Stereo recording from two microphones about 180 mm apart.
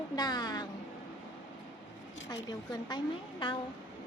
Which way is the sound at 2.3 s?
20° left (ahead or behind).